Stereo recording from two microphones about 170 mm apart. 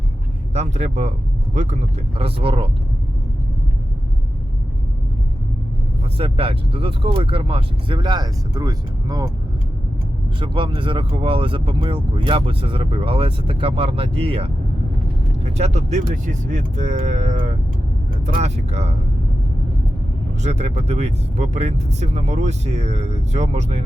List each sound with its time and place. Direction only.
0.5 s speech: 40° right (ahead or behind)
2.1 s speech: 35° right (ahead or behind)
6.1 s speech: 30° right (ahead or behind)
10.4 s speech: 30° right (ahead or behind)
20.4 s speech: 40° right (ahead or behind)